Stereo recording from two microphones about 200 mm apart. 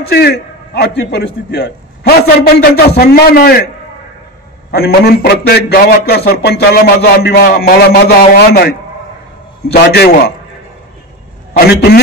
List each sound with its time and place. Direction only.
0.1 s a man's voice: 55° left (ahead or behind)
4.6 s a man's voice: 55° left (ahead or behind)
11.5 s a man's voice: 50° left (ahead or behind)